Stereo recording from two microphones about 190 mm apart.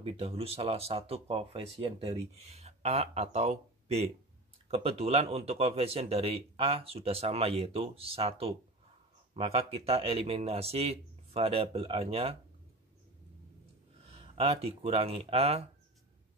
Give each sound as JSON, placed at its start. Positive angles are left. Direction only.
{"t": 0.0, "sound": "speech", "side_deg": -30}
{"t": 14.0, "sound": "speech", "side_deg": -30}